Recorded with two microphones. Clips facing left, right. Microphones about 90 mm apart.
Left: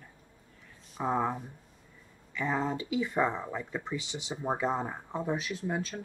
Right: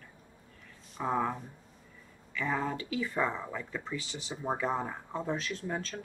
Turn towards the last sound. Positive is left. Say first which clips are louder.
# left 2 dB
turn(degrees=10)  # may be behind; listen again after turning